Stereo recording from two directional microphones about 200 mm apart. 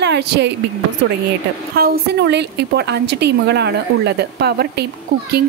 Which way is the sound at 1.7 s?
50° right (ahead or behind).